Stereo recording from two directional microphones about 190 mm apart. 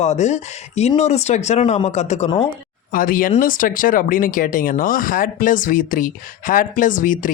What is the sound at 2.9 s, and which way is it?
Speech, 45° left (ahead or behind).